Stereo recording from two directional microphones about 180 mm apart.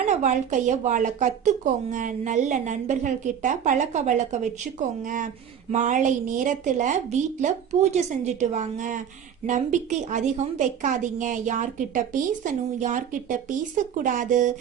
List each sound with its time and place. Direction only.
0.0 s speech: 40° right (ahead or behind)